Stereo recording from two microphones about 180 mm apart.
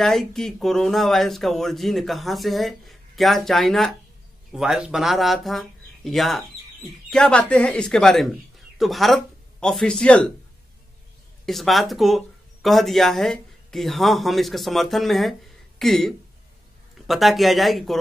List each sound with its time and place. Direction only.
0.0 s speech: centre (ahead or behind)
11.4 s speech: centre (ahead or behind)